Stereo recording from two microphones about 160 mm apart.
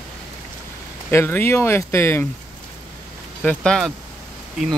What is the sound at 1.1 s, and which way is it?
Speech, 15° left (ahead or behind).